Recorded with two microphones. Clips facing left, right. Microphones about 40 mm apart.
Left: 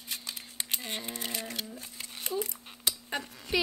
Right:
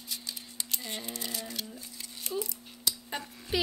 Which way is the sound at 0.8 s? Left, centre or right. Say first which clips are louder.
Left 1 dB; left.